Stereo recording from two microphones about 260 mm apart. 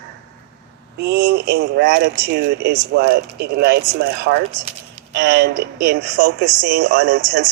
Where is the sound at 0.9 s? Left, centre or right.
Right.